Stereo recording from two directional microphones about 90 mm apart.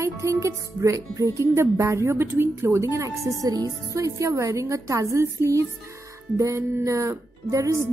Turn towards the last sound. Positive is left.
turn(degrees=-35)  # may be behind; listen again after turning